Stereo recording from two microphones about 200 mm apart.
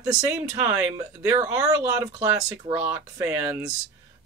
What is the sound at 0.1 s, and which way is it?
Speech, 10° right (ahead or behind).